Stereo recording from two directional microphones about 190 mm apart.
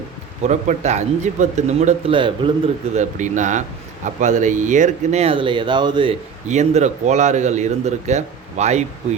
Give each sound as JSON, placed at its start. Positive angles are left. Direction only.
{"t": 0.4, "sound": "speech", "side_deg": -40}
{"t": 2.1, "sound": "speech", "side_deg": -25}
{"t": 2.9, "sound": "speech", "side_deg": -40}
{"t": 6.5, "sound": "speech", "side_deg": -40}